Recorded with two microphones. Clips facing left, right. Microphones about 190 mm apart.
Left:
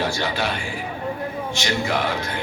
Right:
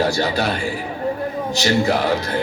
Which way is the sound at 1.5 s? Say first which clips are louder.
Right 7 dB; 40° right (ahead or behind).